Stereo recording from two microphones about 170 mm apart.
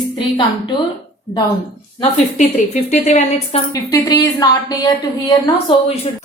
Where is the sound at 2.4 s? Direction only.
45° left (ahead or behind).